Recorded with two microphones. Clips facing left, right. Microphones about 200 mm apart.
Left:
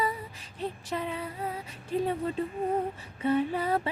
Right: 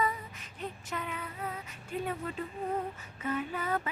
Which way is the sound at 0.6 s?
30° left (ahead or behind).